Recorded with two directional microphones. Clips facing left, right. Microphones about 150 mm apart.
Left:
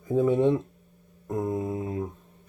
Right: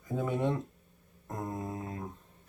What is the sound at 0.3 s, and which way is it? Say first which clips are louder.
Speech: left 8 dB; 15° left (ahead or behind).